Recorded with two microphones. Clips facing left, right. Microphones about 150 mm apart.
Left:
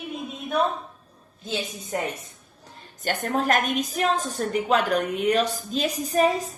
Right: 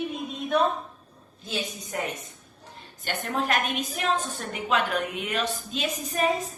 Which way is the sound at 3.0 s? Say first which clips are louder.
Left 4 dB; 45° left (ahead or behind).